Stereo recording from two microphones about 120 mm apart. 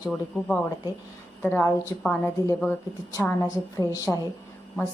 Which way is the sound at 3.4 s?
30° left (ahead or behind).